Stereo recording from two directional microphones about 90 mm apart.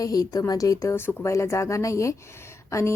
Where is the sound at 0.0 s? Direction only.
40° left (ahead or behind).